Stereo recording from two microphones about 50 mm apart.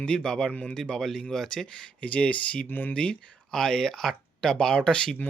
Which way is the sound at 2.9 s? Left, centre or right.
Left.